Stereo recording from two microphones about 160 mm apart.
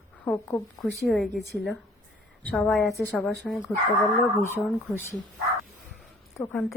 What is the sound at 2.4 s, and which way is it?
A woman's voice, 10° left (ahead or behind).